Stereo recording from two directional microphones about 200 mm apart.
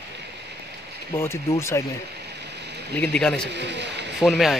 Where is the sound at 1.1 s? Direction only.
15° left (ahead or behind).